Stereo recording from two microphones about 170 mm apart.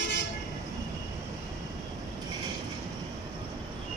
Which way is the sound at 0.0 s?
90° left.